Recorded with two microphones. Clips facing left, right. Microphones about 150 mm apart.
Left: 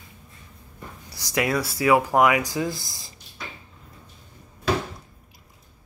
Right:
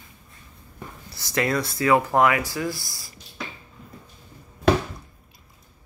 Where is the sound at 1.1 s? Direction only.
10° left (ahead or behind).